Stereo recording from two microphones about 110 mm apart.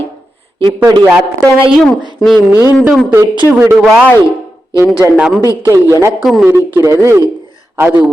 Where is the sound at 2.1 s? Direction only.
Centre (ahead or behind).